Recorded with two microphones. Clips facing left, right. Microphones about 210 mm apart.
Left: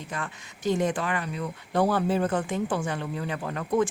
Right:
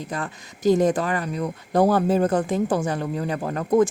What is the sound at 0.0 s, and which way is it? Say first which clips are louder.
Speech: right 5 dB; 40° right (ahead or behind).